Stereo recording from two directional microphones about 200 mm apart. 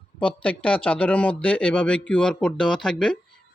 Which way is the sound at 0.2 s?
5° left (ahead or behind).